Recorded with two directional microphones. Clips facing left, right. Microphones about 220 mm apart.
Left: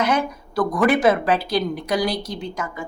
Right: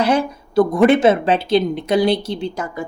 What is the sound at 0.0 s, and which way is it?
A woman's voice, 30° right (ahead or behind).